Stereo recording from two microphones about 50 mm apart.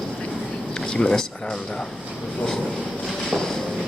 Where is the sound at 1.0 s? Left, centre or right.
Left.